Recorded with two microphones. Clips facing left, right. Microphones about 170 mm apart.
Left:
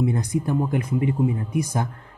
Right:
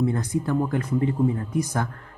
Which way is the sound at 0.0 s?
15° left (ahead or behind).